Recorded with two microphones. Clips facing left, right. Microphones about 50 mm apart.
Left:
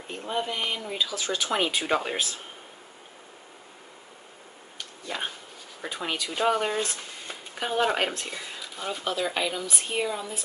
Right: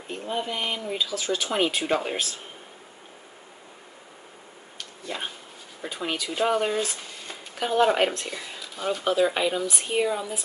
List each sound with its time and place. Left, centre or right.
0.1 s speech: centre
5.0 s insect: centre
5.9 s speech: centre
7.2 s a sound: centre
8.2 s speech: centre
9.0 s speech: centre